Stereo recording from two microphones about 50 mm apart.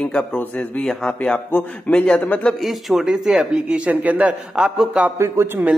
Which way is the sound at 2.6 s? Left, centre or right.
Centre.